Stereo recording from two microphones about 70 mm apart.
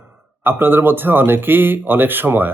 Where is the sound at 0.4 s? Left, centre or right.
Right.